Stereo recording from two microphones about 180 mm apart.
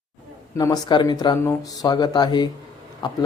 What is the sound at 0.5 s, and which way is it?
Speech, 20° left (ahead or behind).